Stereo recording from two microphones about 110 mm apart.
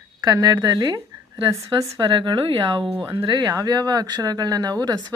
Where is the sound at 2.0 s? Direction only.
45° right (ahead or behind).